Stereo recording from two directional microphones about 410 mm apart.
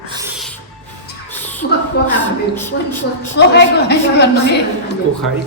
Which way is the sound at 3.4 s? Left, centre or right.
Left.